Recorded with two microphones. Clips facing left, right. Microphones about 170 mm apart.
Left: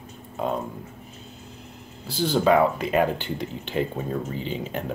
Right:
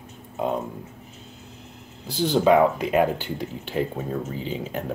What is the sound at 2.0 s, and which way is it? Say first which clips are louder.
Speech: right 1 dB; 15° right (ahead or behind).